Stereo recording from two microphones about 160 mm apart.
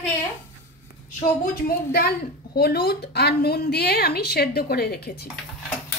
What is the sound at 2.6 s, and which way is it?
A woman's voice, 85° left.